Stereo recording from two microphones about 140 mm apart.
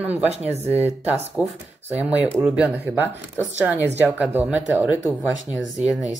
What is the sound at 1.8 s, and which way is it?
Speech, 10° right (ahead or behind).